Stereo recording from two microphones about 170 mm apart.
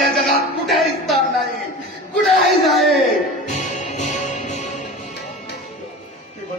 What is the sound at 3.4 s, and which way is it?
Music, 45° left (ahead or behind).